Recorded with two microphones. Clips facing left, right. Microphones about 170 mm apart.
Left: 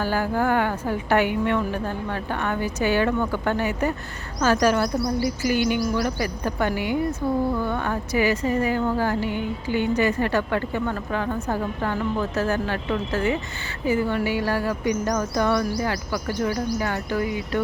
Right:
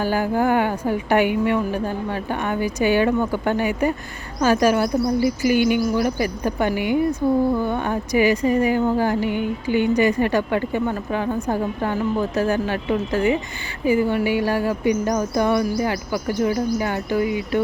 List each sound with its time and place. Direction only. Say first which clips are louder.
0.0 s speech: right 3 dB; 15° right (ahead or behind)